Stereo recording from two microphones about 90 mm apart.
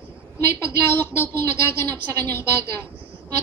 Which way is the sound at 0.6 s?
25° left (ahead or behind).